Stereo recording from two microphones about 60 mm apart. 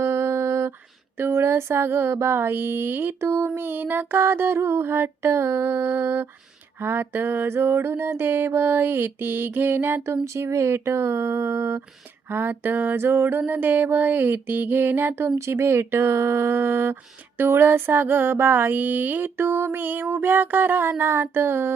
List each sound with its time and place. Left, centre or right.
0.0 s a sound: right
1.2 s mantra: right
2.1 s speech: right
3.2 s mantra: right
6.7 s speech: right
10.3 s mantra: right
12.3 s speech: right
15.4 s speech: right